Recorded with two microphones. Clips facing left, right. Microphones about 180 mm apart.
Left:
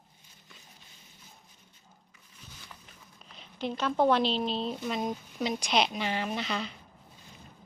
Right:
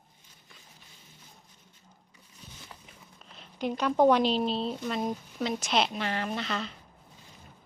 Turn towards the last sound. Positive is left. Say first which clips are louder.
# even
turn(degrees=5)  # may be behind; listen again after turning